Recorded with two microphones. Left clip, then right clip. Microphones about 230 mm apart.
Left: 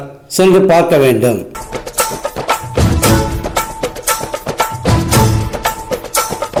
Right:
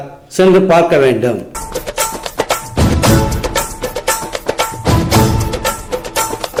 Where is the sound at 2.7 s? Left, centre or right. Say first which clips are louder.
Right 1 dB; centre.